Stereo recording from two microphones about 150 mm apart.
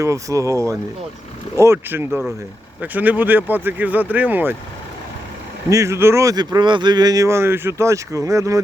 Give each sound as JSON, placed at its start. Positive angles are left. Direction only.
{"t": 0.0, "sound": "speech", "side_deg": -20}
{"t": 5.6, "sound": "speech", "side_deg": -20}